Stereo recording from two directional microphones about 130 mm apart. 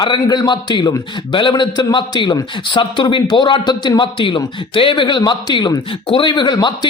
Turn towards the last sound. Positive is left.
turn(degrees=35)  # may be behind; listen again after turning